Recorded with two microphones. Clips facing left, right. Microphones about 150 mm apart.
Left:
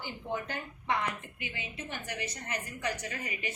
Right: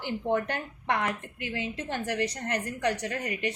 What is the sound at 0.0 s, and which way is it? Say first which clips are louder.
A woman's voice: right 9 dB; 70° right (ahead or behind).